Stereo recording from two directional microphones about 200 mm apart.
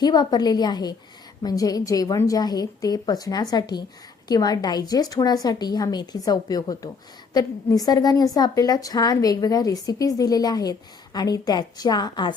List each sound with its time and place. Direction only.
0.0 s a woman's voice: 20° left (ahead or behind)